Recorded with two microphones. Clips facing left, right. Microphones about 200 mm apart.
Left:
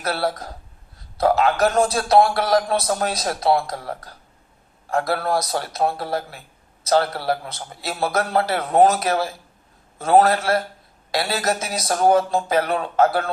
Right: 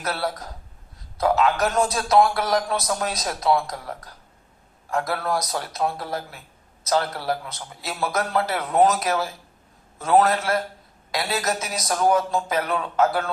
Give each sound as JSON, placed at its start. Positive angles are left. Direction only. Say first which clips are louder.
{"t": 0.0, "sound": "a man's voice", "louder": "left 4 dB", "side_deg": 30}